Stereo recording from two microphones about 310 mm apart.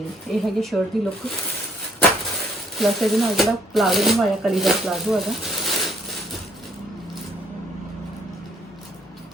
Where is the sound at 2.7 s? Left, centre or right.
Centre.